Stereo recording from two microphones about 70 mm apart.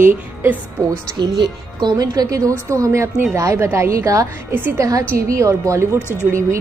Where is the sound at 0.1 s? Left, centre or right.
Right.